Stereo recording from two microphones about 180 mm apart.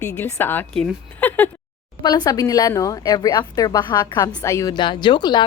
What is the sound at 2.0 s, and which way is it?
A woman's voice, 20° left (ahead or behind).